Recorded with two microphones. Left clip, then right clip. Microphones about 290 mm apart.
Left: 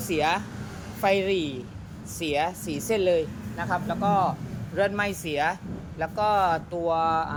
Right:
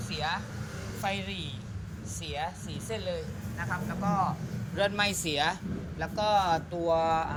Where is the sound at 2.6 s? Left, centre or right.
Left.